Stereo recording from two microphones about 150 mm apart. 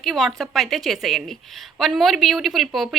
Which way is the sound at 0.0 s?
Centre (ahead or behind).